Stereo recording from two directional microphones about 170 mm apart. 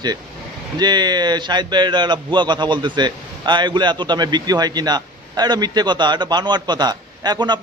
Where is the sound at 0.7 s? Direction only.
25° right (ahead or behind).